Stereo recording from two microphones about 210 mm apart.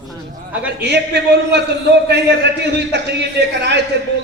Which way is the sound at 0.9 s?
55° right (ahead or behind).